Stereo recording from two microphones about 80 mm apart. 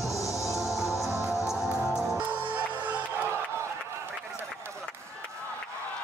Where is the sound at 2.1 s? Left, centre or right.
Centre.